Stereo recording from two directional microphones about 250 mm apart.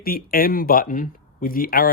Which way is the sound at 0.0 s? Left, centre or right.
Left.